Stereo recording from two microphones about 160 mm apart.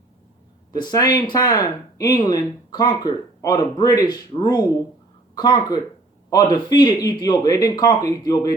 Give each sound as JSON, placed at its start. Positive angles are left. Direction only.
{"t": 0.7, "sound": "speech", "side_deg": 25}